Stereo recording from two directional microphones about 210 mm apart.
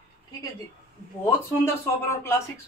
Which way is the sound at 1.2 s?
10° left (ahead or behind).